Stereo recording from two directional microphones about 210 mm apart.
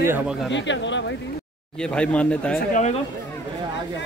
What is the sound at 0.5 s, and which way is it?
Speech, 60° left (ahead or behind).